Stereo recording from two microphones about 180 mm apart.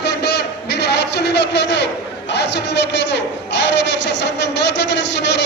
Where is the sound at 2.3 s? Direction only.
75° left (ahead or behind).